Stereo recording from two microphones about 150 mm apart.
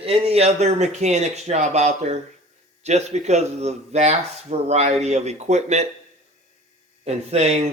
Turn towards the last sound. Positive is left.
turn(degrees=-45)  # may be behind; listen again after turning